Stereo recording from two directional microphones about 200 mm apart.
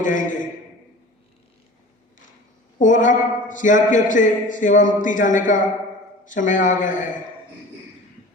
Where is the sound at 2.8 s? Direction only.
40° left (ahead or behind).